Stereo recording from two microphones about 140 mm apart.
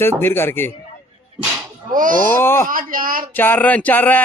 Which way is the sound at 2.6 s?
80° right.